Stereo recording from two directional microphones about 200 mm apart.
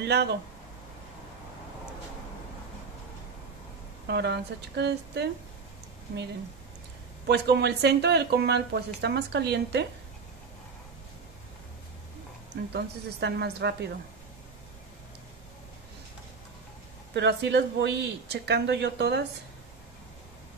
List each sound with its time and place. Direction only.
0.0 s speech: 55° right (ahead or behind)
4.1 s speech: 55° right (ahead or behind)
7.2 s speech: 55° right (ahead or behind)
12.7 s speech: 55° right (ahead or behind)
17.1 s speech: 60° right (ahead or behind)